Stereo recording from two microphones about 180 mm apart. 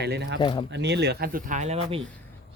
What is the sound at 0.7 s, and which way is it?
Speech, 70° right (ahead or behind).